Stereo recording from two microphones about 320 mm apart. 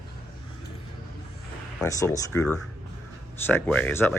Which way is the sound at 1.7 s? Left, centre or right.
Centre.